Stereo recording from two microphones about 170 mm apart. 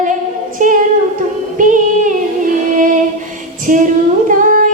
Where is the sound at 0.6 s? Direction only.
50° right (ahead or behind).